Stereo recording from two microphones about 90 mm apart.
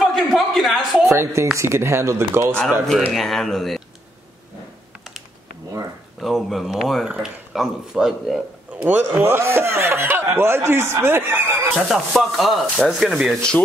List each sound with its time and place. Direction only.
0.0 s a sound: centre (ahead or behind)
1.1 s speech: 30° right (ahead or behind)
3.1 s sanding: centre (ahead or behind)
6.2 s sanding: centre (ahead or behind)
8.7 s speech: 20° right (ahead or behind)
11.7 s sanding: centre (ahead or behind)